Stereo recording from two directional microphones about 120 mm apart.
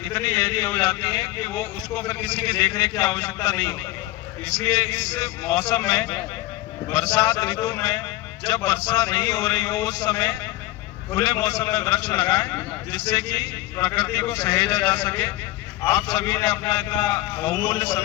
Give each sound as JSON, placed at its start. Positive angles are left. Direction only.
{"t": 0.1, "sound": "a man's voice", "side_deg": 30}